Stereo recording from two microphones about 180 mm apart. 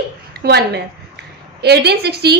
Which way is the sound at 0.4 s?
65° right (ahead or behind).